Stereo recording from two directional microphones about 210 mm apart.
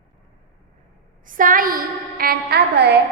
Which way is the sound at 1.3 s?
40° right (ahead or behind).